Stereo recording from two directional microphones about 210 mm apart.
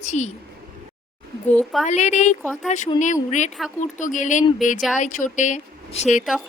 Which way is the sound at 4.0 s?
35° left (ahead or behind).